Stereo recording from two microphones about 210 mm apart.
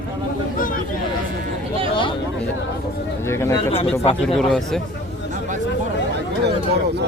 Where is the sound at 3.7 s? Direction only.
30° left (ahead or behind).